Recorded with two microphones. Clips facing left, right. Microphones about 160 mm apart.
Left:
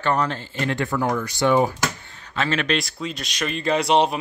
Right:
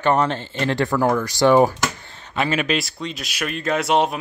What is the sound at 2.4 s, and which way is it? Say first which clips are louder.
Speech: right 2 dB; 10° right (ahead or behind).